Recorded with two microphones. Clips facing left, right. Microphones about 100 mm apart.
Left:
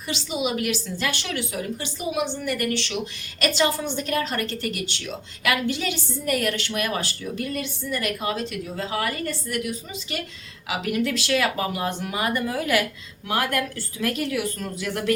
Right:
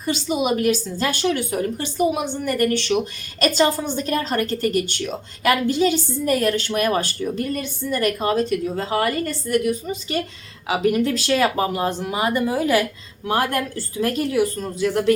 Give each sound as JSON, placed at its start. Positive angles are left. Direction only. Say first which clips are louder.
{"t": 0.0, "sound": "a woman's voice", "louder": "right 5 dB", "side_deg": -45}
{"t": 3.4, "sound": "a woman's voice", "louder": "right 4 dB", "side_deg": -35}